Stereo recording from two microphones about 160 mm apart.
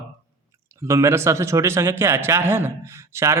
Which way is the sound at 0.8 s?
15° right (ahead or behind).